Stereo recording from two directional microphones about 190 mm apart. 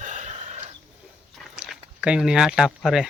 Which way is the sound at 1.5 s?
5° right (ahead or behind).